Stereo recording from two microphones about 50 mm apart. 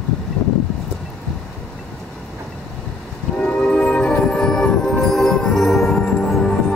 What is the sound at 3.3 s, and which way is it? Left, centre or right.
Music, left.